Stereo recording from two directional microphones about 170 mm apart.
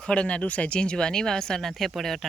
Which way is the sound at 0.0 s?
5° left (ahead or behind).